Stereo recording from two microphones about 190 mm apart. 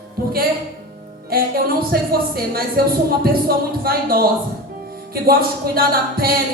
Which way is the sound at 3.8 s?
50° right (ahead or behind).